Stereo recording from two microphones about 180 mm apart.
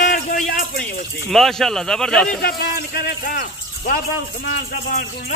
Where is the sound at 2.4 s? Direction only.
60° left (ahead or behind).